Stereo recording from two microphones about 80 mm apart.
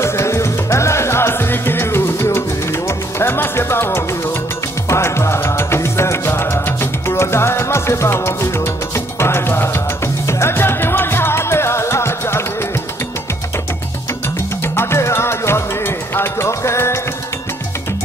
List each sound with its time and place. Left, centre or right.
0.0 s music: left
14.6 s music: left